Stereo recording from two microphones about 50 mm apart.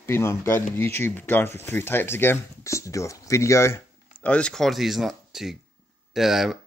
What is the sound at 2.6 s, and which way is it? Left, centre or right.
Speech, left.